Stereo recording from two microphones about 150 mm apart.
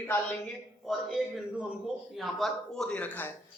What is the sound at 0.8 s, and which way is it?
A man's voice, centre (ahead or behind).